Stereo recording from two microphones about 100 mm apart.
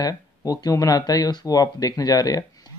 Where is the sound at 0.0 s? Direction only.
40° left (ahead or behind).